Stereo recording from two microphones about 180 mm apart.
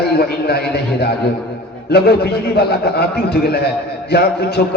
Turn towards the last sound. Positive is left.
turn(degrees=60)  # may be behind; listen again after turning